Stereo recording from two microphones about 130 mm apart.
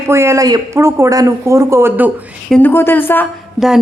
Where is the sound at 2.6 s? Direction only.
15° left (ahead or behind).